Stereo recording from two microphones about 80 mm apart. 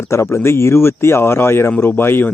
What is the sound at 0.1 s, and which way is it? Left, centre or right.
Speech, left.